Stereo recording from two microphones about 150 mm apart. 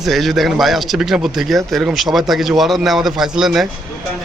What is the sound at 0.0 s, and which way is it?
A man's voice, centre (ahead or behind).